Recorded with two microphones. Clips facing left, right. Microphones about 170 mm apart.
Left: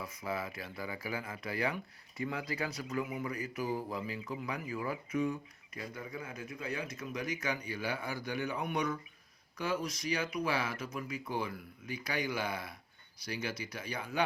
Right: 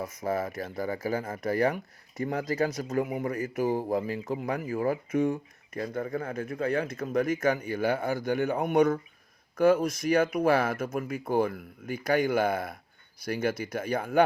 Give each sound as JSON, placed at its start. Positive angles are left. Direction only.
{"t": 0.0, "sound": "speech", "side_deg": -45}